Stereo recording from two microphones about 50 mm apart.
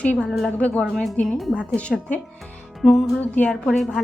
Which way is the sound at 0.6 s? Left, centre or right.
Left.